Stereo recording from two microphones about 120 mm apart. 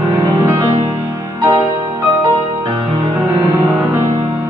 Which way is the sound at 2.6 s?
30° right (ahead or behind).